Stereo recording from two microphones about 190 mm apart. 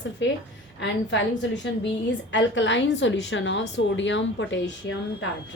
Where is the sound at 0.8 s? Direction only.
75° left (ahead or behind).